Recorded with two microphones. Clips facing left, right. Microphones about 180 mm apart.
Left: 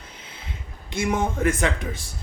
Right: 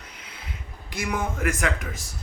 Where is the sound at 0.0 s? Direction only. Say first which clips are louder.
Left 1 dB; 30° left (ahead or behind).